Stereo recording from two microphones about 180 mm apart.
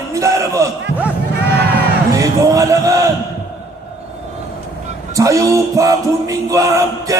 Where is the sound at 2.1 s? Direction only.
20° right (ahead or behind).